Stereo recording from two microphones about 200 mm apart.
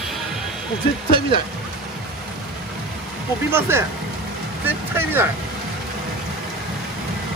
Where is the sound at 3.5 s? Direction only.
10° right (ahead or behind).